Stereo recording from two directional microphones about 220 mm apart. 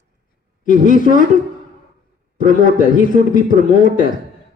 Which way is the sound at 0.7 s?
40° left (ahead or behind).